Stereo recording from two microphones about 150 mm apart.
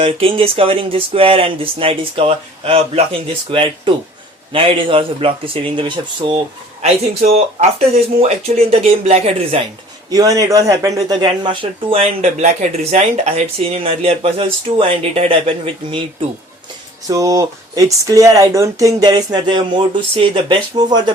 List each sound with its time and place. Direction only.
0.0 s speech: 35° right (ahead or behind)
6.8 s speech: 45° right (ahead or behind)
10.1 s speech: 25° right (ahead or behind)
17.1 s speech: 20° right (ahead or behind)